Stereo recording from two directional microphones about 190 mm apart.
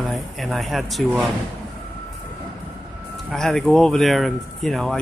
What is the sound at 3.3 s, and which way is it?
Speech, centre (ahead or behind).